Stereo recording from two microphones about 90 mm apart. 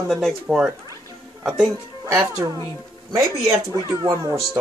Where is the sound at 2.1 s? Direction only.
40° right (ahead or behind).